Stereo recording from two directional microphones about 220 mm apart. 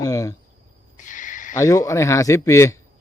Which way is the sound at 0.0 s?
15° left (ahead or behind).